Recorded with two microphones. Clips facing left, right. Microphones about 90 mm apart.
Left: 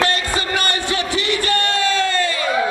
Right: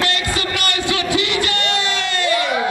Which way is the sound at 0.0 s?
35° left (ahead or behind).